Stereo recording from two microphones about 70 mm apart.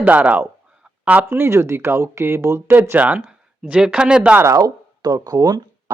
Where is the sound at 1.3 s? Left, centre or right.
Right.